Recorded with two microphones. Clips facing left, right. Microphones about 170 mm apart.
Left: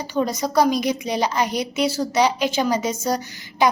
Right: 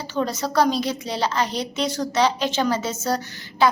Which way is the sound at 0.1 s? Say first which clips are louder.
Left 2 dB; 10° left (ahead or behind).